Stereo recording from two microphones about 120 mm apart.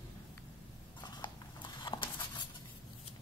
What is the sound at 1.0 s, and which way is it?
Clip-clop, 40° left (ahead or behind).